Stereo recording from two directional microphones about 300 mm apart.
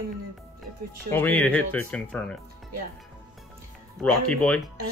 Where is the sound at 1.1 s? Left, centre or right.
Centre.